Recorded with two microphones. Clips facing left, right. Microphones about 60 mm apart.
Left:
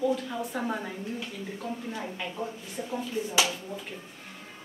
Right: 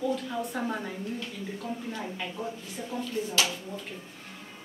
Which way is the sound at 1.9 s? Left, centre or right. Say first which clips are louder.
Even; centre.